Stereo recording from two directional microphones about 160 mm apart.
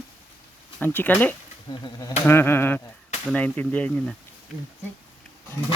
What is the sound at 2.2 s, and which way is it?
Speech, 15° left (ahead or behind).